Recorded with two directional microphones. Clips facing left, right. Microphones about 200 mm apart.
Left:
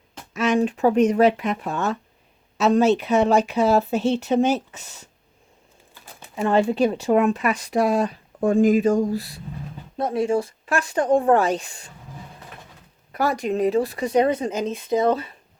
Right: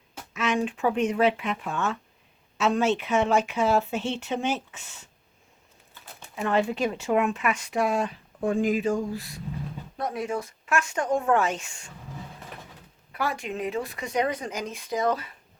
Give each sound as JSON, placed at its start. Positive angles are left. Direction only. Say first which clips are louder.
{"t": 0.3, "sound": "speech", "louder": "left 6 dB", "side_deg": 40}
{"t": 6.3, "sound": "speech", "louder": "left 5 dB", "side_deg": 35}
{"t": 13.1, "sound": "speech", "louder": "left 8 dB", "side_deg": 40}